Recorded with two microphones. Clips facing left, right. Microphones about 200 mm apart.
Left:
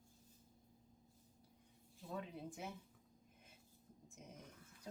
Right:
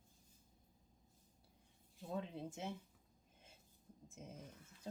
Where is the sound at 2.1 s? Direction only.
25° right (ahead or behind).